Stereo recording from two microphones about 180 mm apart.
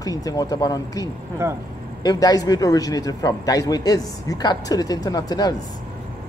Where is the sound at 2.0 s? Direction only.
20° left (ahead or behind).